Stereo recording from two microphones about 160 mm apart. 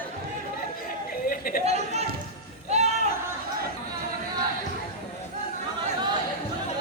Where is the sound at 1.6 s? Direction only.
40° right (ahead or behind).